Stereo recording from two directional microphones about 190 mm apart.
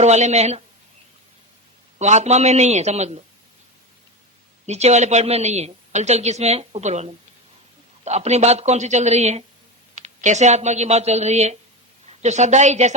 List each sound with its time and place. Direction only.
0.0 s a woman's voice: 35° right (ahead or behind)
2.0 s a woman's voice: 35° right (ahead or behind)
4.6 s a woman's voice: 35° right (ahead or behind)